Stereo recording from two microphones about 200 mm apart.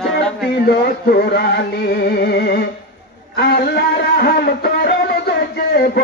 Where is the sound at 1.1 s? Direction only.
50° left (ahead or behind).